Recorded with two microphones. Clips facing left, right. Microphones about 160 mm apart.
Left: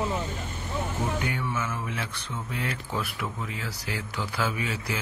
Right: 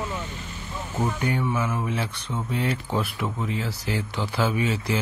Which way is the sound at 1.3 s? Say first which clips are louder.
Right 5 dB; 35° right (ahead or behind).